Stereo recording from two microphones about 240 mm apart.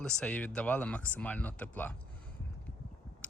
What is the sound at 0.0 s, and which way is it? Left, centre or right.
Speech, centre.